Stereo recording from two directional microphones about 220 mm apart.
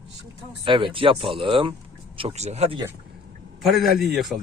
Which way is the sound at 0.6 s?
25° right (ahead or behind).